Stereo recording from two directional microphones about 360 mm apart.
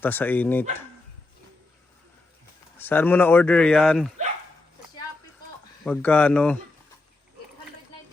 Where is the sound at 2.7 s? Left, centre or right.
Centre.